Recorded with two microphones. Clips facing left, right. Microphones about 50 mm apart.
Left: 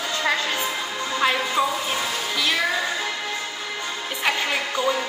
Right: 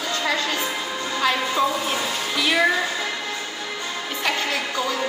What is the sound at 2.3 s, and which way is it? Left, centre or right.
Speech, centre.